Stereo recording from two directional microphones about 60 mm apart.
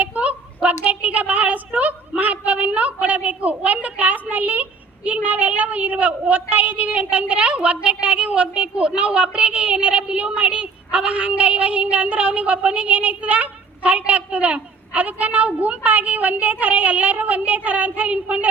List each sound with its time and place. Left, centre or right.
0.0 s a woman's voice: right